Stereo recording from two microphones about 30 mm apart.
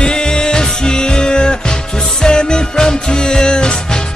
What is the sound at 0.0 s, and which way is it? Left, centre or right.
Music, left.